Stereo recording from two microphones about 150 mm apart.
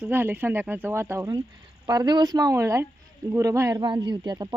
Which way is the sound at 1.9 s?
30° right (ahead or behind).